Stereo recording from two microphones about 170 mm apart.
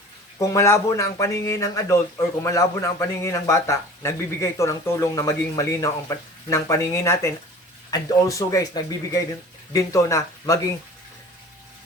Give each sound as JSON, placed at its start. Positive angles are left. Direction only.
{"t": 0.3, "sound": "speech", "side_deg": 20}